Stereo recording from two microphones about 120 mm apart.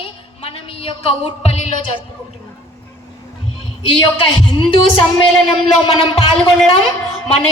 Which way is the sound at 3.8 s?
45° left (ahead or behind).